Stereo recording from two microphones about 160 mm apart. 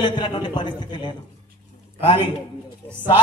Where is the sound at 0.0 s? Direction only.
30° left (ahead or behind).